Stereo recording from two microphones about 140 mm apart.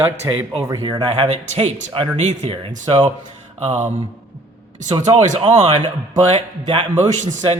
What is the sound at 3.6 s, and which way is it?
Speech, 50° right (ahead or behind).